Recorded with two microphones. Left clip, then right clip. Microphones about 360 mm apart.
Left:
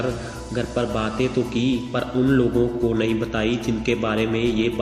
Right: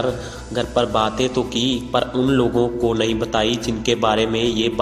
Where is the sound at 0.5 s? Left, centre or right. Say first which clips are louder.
Right 6 dB; centre.